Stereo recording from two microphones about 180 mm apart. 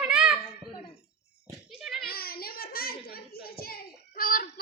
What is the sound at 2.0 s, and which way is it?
A child's voice, 55° left (ahead or behind).